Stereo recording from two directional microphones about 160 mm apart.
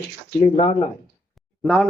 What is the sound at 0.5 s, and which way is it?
Speech, 35° left (ahead or behind).